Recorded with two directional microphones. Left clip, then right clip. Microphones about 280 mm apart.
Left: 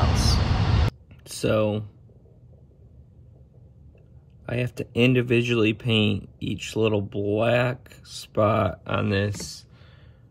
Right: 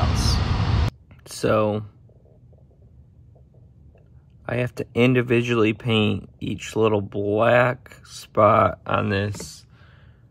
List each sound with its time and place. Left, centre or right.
0.0 s vehicle: centre
1.5 s speech: centre
5.0 s speech: centre